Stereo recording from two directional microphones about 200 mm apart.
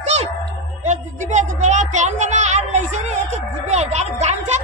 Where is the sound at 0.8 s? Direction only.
35° right (ahead or behind).